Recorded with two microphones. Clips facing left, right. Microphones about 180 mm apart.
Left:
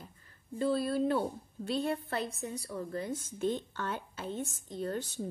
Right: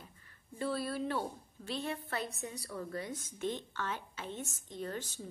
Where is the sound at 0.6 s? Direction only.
30° left (ahead or behind).